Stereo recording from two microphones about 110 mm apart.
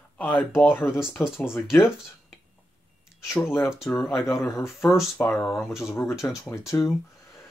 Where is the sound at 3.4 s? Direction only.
5° right (ahead or behind).